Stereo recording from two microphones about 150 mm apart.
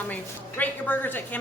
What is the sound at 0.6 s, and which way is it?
Speech, 10° left (ahead or behind).